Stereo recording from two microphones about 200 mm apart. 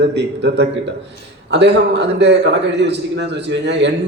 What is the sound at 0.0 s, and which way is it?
A man's voice, 60° right (ahead or behind).